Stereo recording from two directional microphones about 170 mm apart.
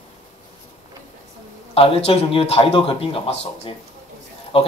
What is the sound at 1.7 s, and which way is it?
A man's voice, 35° left (ahead or behind).